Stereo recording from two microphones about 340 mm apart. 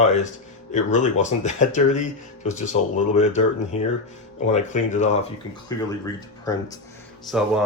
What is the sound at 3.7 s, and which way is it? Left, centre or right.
Speech, centre.